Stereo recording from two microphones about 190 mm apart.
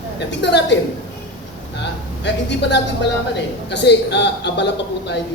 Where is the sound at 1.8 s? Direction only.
65° left (ahead or behind).